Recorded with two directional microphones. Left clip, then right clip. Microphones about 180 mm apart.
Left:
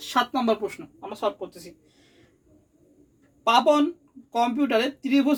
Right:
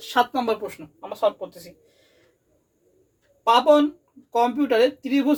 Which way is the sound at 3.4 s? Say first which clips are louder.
Right 3 dB; 35° left (ahead or behind).